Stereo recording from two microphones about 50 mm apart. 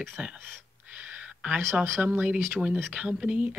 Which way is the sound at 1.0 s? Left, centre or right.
Right.